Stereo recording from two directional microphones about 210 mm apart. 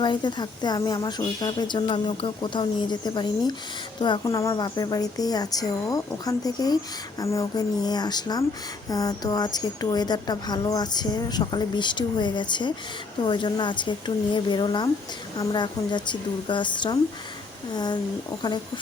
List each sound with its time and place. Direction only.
0.0 s a woman's voice: 20° left (ahead or behind)